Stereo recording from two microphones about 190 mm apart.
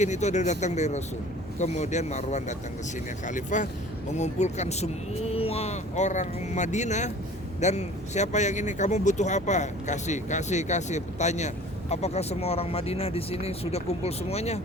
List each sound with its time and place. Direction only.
0.0 s speech: 40° left (ahead or behind)